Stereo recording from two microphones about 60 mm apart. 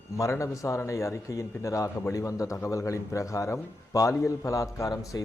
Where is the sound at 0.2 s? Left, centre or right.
Left.